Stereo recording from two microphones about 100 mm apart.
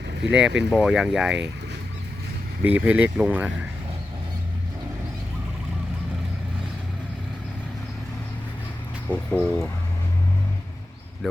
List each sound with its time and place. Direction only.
0.3 s speech: 10° right (ahead or behind)
2.6 s speech: 15° right (ahead or behind)
9.0 s speech: 15° left (ahead or behind)